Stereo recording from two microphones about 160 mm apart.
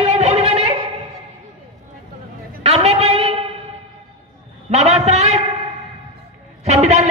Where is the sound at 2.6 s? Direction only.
40° right (ahead or behind).